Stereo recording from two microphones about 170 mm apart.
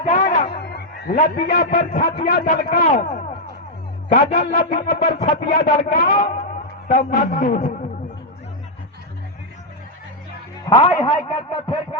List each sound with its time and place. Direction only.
0.0 s music: 45° left (ahead or behind)
0.5 s a sound: 70° left (ahead or behind)
1.5 s music: 65° left (ahead or behind)
2.2 s a man's voice: 55° left (ahead or behind)
4.4 s music: 65° left (ahead or behind)
5.4 s a man's voice: 55° left (ahead or behind)
10.7 s a man's voice: 25° left (ahead or behind)